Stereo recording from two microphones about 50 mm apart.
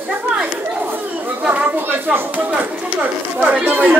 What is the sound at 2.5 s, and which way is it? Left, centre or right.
Speech, right.